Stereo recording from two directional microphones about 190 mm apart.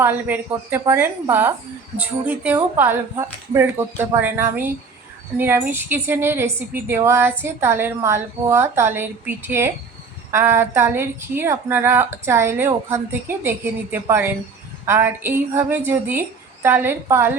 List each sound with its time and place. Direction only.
0.0 s a woman's voice: 10° right (ahead or behind)